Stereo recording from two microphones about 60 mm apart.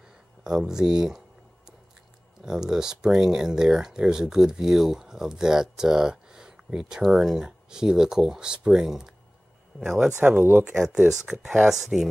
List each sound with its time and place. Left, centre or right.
0.4 s speech: centre
2.4 s speech: centre